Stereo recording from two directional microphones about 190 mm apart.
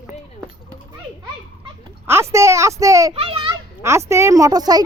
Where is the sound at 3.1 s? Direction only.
30° right (ahead or behind).